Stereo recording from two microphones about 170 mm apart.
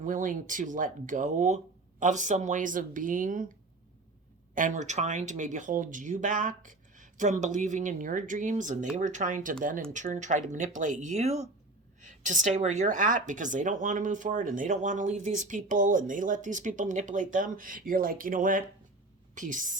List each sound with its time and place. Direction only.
0.0 s speech: 50° right (ahead or behind)
4.5 s a woman's voice: 50° right (ahead or behind)